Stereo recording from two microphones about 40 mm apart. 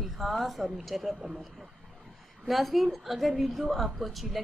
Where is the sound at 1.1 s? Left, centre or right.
Centre.